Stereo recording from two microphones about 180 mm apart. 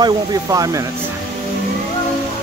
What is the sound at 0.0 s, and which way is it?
Speech, 20° right (ahead or behind).